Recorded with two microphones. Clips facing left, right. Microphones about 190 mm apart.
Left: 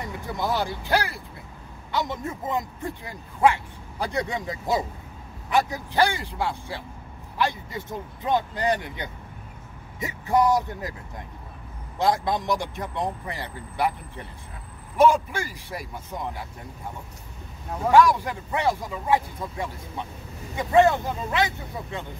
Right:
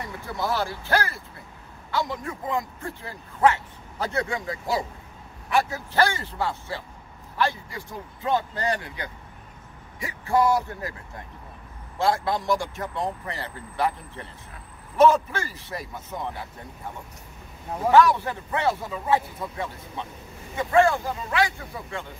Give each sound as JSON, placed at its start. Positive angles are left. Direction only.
{"t": 0.2, "sound": "speech", "side_deg": 15}
{"t": 17.9, "sound": "speech", "side_deg": 10}